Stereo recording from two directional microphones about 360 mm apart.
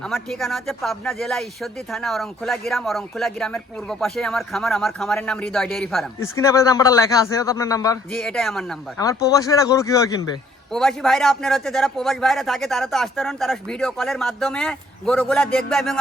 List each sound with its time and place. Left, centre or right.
0.0 s speech: centre